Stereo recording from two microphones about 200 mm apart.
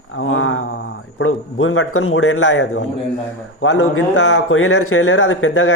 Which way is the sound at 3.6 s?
90° left.